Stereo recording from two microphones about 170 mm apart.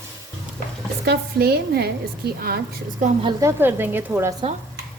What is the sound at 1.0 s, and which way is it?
A woman's voice, 70° right (ahead or behind).